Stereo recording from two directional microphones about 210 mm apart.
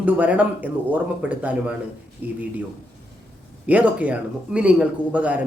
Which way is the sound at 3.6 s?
5° right (ahead or behind).